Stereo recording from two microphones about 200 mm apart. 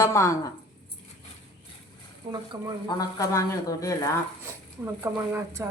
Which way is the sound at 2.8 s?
20° left (ahead or behind).